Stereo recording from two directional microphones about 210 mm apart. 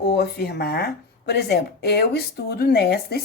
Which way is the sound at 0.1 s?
50° left (ahead or behind).